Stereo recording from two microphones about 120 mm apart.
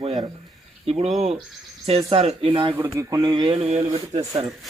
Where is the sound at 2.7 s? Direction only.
25° right (ahead or behind).